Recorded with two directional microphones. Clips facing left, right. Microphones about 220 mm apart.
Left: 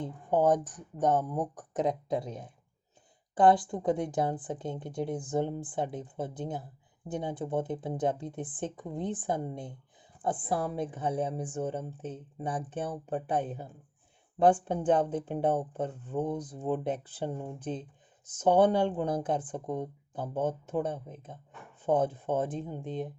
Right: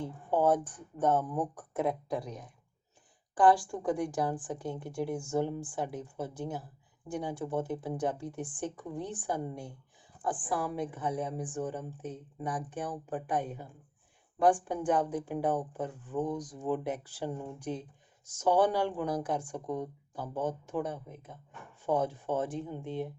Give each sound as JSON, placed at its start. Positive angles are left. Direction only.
{"t": 0.0, "sound": "a woman's voice", "side_deg": 15}